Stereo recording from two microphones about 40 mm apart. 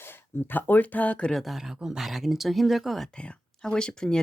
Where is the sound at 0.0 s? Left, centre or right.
Left.